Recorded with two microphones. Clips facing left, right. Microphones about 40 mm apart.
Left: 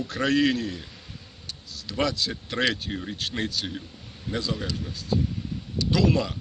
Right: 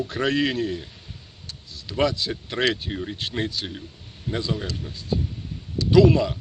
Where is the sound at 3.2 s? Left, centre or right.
Right.